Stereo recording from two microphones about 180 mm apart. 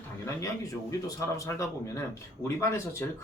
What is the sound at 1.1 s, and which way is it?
A man's voice, 15° left (ahead or behind).